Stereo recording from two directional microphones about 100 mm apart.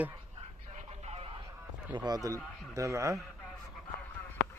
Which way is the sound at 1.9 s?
45° right (ahead or behind).